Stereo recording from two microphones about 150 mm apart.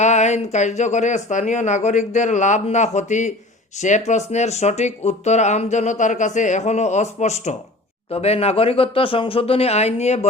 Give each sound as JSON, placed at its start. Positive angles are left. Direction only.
{"t": 0.0, "sound": "speech", "side_deg": 50}